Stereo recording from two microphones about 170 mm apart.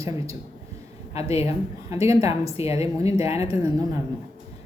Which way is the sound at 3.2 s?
15° right (ahead or behind).